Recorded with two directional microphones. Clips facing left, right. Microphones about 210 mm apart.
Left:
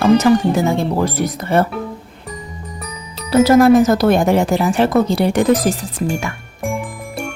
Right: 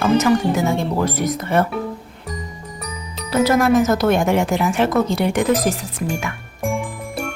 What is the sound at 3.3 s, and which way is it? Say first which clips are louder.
Speech: left 6 dB; 35° left (ahead or behind).